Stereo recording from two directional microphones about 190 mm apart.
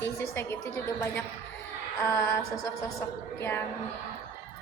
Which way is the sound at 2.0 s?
15° left (ahead or behind).